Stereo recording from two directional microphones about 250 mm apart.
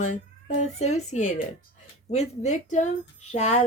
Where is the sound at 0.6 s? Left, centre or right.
Left.